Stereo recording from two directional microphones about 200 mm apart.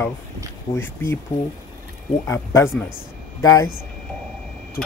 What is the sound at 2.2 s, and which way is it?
Speech, 15° left (ahead or behind).